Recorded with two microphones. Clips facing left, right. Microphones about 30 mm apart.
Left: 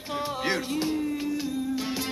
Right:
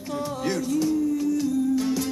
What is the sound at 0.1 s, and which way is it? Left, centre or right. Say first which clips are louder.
Music: right 1 dB; left.